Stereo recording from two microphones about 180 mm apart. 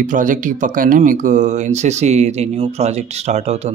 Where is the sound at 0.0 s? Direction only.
45° right (ahead or behind).